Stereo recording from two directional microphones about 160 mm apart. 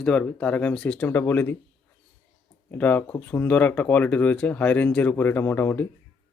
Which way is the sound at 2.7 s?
10° left (ahead or behind).